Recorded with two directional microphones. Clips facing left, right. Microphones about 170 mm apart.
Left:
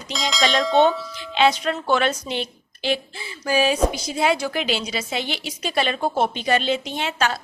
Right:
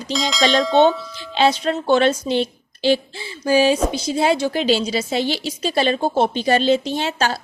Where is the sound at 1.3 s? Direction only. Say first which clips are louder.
Right 2 dB; 30° right (ahead or behind).